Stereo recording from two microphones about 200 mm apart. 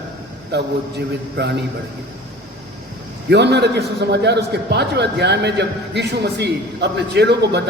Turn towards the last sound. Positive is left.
turn(degrees=-55)  # may be behind; listen again after turning